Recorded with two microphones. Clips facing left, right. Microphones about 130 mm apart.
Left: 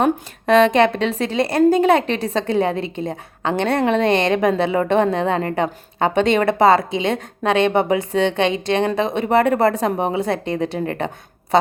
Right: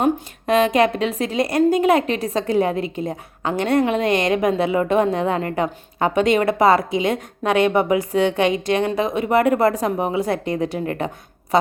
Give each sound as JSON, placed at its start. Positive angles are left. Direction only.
{"t": 0.4, "sound": "a woman's voice", "side_deg": 35}